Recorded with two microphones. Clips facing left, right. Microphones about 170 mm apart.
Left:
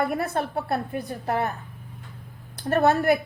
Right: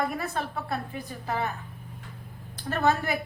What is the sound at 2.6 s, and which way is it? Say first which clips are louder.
Speech: left 6 dB; 60° left (ahead or behind).